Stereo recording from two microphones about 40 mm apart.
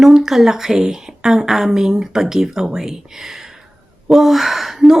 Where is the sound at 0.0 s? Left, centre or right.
Centre.